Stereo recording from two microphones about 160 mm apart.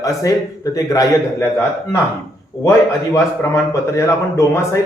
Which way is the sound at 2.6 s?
15° left (ahead or behind).